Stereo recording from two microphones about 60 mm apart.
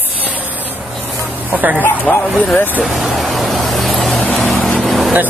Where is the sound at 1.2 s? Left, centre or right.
Right.